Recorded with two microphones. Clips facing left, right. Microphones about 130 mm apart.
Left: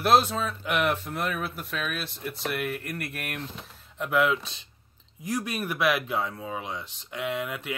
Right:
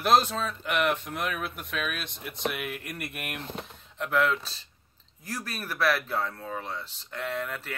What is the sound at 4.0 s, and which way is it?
Speech, 10° left (ahead or behind).